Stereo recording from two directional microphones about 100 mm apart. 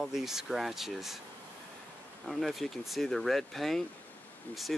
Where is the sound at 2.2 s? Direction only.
Centre (ahead or behind).